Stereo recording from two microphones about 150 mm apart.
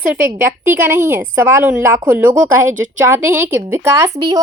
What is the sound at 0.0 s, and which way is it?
Speech, 10° right (ahead or behind).